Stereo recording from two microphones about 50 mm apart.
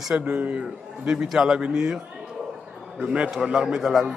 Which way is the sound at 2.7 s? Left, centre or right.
Centre.